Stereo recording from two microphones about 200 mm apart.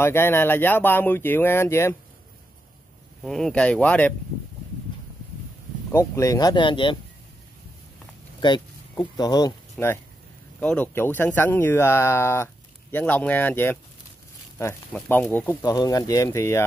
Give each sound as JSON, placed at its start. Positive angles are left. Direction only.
{"t": 0.0, "sound": "speech", "side_deg": 10}
{"t": 3.3, "sound": "speech", "side_deg": 0}
{"t": 5.9, "sound": "speech", "side_deg": 15}
{"t": 8.4, "sound": "a sound", "side_deg": 20}
{"t": 9.1, "sound": "speech", "side_deg": 20}